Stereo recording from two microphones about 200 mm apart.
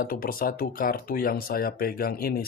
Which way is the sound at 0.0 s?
45° left (ahead or behind).